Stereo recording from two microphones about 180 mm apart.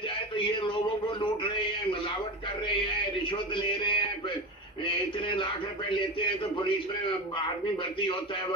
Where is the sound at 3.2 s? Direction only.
30° left (ahead or behind).